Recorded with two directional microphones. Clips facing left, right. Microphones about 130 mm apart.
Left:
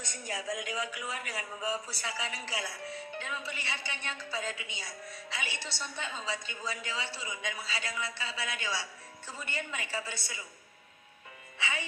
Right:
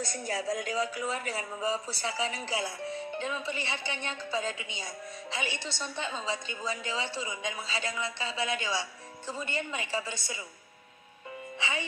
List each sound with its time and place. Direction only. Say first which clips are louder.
0.0 s speech: right 6 dB; 35° right (ahead or behind)
11.6 s speech: right 2 dB; 25° right (ahead or behind)